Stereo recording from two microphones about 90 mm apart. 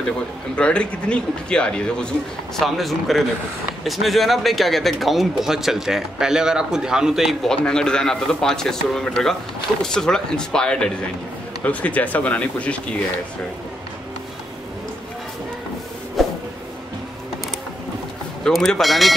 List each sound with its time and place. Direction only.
0.6 s a man's voice: 10° left (ahead or behind); by 7.3 s 5° right (ahead or behind)
7.4 s a man's voice: 10° left (ahead or behind)
16.2 s vehicle: centre (ahead or behind)
18.4 s speech: 5° left (ahead or behind)